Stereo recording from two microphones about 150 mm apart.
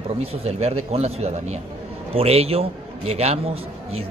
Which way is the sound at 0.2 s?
40° right (ahead or behind).